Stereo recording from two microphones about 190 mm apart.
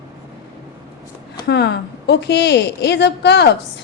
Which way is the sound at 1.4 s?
60° left (ahead or behind).